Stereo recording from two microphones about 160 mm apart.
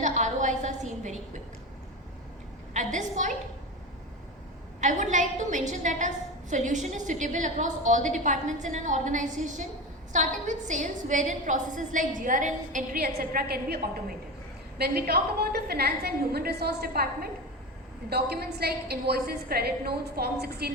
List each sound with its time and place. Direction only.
0.0 s a sound: 50° right (ahead or behind)
2.7 s a woman's voice: 50° right (ahead or behind)
4.8 s a woman's voice: 50° right (ahead or behind)
13.0 s a woman's voice: 75° right (ahead or behind)